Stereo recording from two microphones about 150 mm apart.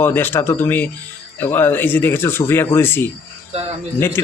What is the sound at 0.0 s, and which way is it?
Speech, 15° left (ahead or behind).